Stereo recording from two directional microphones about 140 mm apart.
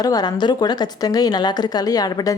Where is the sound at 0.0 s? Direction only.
30° left (ahead or behind).